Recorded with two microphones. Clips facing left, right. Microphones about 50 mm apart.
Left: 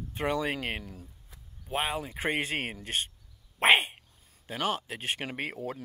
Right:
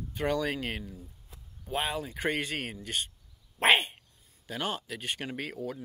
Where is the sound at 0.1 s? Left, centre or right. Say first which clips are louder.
Even; left.